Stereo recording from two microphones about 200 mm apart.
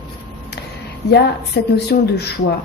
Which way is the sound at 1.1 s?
55° left (ahead or behind).